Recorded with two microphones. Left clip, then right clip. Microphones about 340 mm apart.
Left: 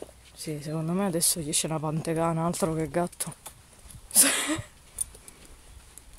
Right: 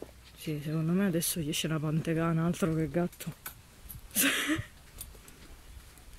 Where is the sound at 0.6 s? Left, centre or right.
Centre.